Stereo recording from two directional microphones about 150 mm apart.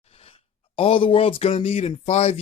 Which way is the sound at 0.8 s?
35° left (ahead or behind).